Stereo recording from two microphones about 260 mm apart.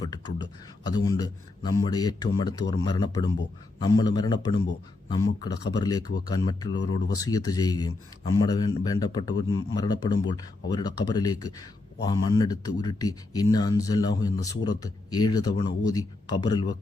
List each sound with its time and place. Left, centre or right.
0.0 s a man's voice: centre